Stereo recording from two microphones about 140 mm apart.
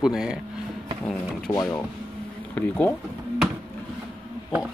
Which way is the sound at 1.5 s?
15° left (ahead or behind).